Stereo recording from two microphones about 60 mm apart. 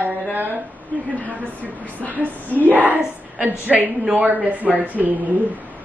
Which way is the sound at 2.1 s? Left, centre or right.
Right.